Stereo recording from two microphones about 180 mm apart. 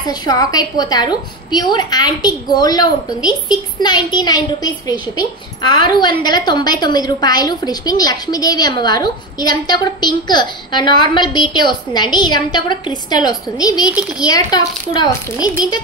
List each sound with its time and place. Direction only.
0.0 s a woman's voice: 20° left (ahead or behind)